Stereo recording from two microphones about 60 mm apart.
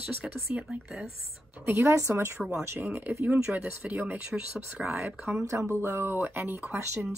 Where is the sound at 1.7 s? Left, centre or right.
Right.